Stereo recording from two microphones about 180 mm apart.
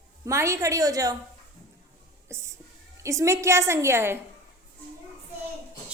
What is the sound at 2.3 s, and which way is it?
A woman's voice, 15° right (ahead or behind).